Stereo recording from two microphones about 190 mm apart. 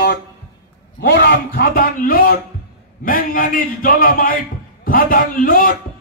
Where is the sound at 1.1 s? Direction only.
50° left (ahead or behind).